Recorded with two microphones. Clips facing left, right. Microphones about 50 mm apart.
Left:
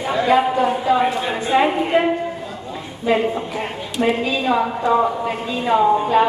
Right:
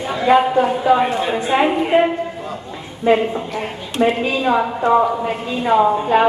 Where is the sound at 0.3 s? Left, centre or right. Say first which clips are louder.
Right 4 dB; right.